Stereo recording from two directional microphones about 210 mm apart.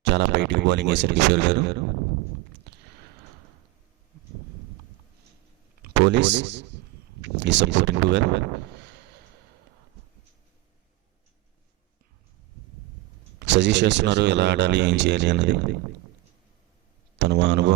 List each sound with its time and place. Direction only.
0.0 s speech: 55° right (ahead or behind)
5.8 s speech: 55° right (ahead or behind)
13.5 s speech: 55° right (ahead or behind)
17.2 s speech: 55° right (ahead or behind)